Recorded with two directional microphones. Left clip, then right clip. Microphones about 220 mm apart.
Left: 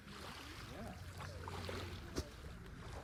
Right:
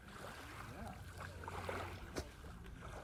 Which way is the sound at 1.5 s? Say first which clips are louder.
Right 4 dB; centre (ahead or behind).